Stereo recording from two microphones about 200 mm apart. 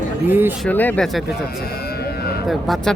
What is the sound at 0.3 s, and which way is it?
Speech, 10° right (ahead or behind).